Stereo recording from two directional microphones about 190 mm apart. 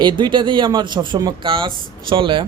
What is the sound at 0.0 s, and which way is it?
Speech, 25° right (ahead or behind).